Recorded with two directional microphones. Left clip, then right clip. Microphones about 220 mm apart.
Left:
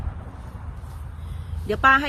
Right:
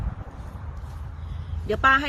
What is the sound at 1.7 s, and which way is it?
Speech, 25° left (ahead or behind).